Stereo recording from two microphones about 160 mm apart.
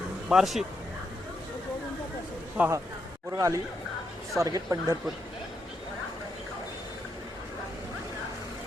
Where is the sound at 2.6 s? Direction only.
20° right (ahead or behind).